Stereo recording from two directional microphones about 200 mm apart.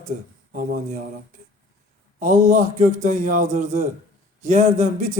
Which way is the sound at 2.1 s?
40° right (ahead or behind).